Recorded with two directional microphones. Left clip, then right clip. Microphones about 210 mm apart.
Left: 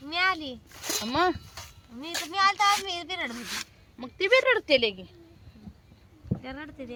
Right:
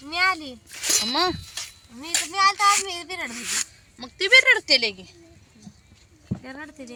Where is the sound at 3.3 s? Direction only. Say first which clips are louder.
Right 6 dB; 20° left (ahead or behind); by 4.9 s 35° left (ahead or behind).